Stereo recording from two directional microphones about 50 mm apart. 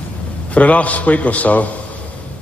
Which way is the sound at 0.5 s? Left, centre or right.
Left.